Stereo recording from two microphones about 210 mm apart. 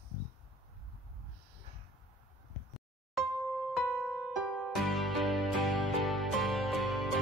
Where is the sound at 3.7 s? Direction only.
Centre (ahead or behind).